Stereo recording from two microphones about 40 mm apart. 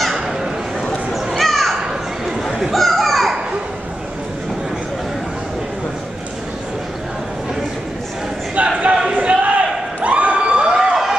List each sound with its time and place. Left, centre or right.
1.1 s children playing: centre
1.8 s children playing: centre
2.4 s children playing: centre
8.6 s a sound: right
10.7 s emergency vehicle: centre